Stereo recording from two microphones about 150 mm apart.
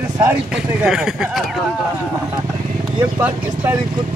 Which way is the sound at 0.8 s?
5° right (ahead or behind).